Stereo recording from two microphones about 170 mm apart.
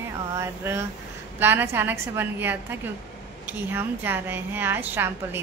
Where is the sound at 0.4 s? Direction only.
15° right (ahead or behind).